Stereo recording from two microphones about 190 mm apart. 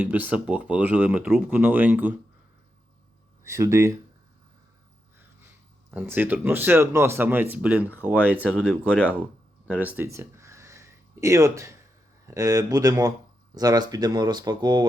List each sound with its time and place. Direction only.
0.0 s speech: 10° right (ahead or behind)
3.4 s speech: 15° right (ahead or behind)
5.9 s speech: 10° right (ahead or behind)
9.6 s a sound: 10° right (ahead or behind)
12.2 s speech: 15° right (ahead or behind)